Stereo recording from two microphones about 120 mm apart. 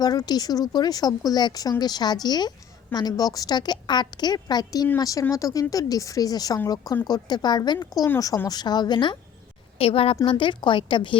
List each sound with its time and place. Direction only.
0.0 s a woman's voice: 35° left (ahead or behind)
8.4 s a woman's voice: 35° left (ahead or behind)
9.7 s a woman's voice: 55° left (ahead or behind)